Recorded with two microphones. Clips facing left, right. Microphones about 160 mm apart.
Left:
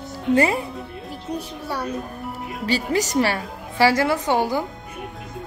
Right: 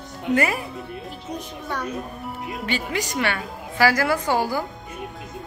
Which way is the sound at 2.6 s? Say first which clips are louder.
Left 6 dB; 40° left (ahead or behind).